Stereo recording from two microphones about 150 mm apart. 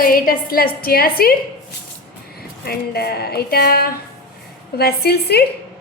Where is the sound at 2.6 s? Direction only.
90° left.